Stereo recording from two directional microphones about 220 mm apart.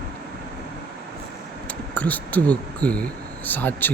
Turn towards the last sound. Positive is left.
turn(degrees=10)  # may be behind; listen again after turning